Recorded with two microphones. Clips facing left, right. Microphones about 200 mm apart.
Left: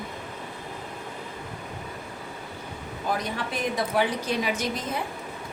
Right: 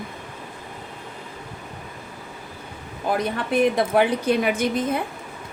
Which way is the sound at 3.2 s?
55° right (ahead or behind).